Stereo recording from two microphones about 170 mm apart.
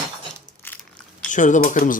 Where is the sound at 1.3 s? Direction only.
45° left (ahead or behind).